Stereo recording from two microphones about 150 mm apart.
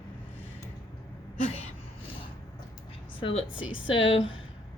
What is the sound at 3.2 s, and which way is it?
A woman's voice, 45° left (ahead or behind).